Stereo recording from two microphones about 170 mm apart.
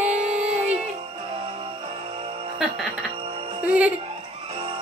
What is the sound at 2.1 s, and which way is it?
Music, 35° right (ahead or behind).